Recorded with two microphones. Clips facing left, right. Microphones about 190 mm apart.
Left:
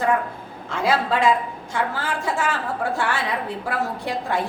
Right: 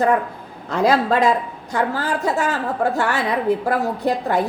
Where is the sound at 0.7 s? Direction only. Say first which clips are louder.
Right 5 dB; 40° right (ahead or behind).